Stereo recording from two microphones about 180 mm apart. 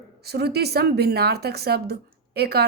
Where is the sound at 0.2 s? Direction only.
65° right (ahead or behind).